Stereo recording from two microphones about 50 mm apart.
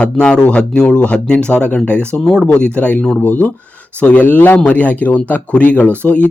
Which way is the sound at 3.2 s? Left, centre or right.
Left.